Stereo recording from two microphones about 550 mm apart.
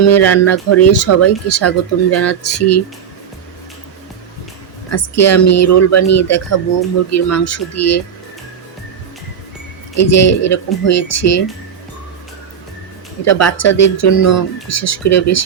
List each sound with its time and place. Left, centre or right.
0.1 s speech: left
4.9 s speech: left
9.9 s speech: left
13.2 s speech: left